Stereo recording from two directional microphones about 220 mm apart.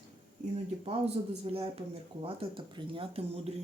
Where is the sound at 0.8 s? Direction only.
25° right (ahead or behind).